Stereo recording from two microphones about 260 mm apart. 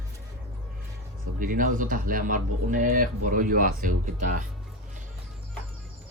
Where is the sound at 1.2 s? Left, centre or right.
Right.